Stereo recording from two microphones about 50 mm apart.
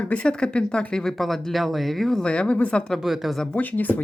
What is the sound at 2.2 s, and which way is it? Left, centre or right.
Speech, left.